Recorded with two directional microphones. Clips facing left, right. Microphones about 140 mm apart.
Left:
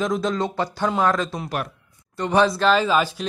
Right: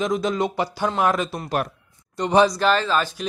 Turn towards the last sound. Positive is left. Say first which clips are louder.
# left 2 dB
turn(degrees=5)  # may be behind; listen again after turning